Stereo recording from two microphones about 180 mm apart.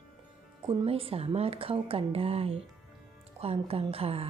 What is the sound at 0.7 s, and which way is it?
Speech, 25° right (ahead or behind).